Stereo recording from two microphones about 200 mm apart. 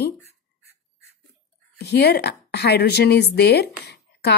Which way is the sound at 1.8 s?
55° left (ahead or behind).